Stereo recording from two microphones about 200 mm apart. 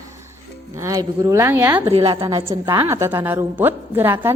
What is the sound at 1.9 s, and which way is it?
A woman's voice, 30° right (ahead or behind).